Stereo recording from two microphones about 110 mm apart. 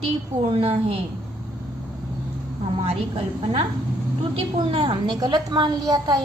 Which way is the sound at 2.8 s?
70° right (ahead or behind).